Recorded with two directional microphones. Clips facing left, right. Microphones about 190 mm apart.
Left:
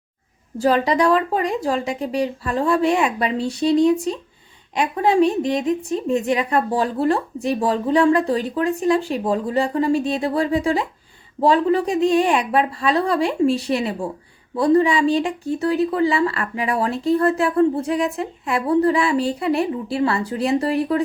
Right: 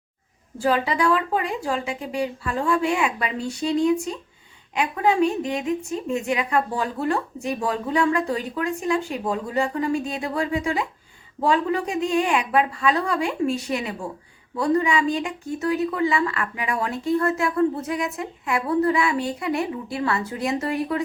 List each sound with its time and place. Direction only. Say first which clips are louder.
0.6 s speech: left 4 dB; 40° left (ahead or behind)